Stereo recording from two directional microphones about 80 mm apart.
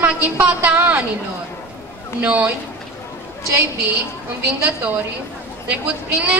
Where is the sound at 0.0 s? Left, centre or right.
Right.